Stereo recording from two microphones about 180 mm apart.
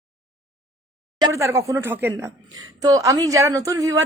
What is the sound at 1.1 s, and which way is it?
A woman's voice, 20° right (ahead or behind).